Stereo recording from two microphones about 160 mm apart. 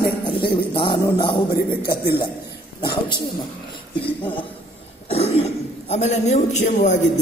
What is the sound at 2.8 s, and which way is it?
A man's voice, 30° left (ahead or behind).